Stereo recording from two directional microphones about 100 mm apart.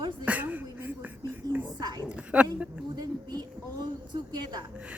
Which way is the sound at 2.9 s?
40° right (ahead or behind).